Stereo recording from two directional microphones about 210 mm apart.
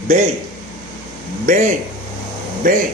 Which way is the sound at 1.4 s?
35° right (ahead or behind).